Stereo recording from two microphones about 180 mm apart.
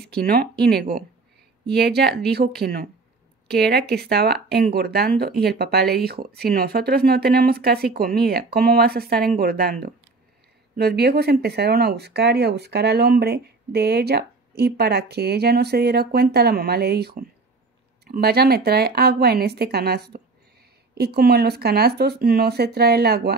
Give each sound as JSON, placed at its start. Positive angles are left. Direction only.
{"t": 0.0, "sound": "speech", "side_deg": -60}